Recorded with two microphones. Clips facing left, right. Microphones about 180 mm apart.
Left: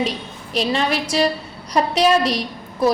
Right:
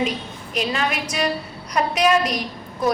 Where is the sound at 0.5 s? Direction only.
35° left (ahead or behind).